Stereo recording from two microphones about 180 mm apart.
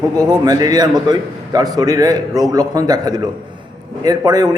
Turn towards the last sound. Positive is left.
turn(degrees=-20)  # may be behind; listen again after turning